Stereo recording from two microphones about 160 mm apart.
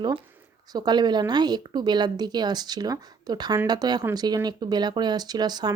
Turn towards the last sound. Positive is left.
turn(degrees=-25)  # may be behind; listen again after turning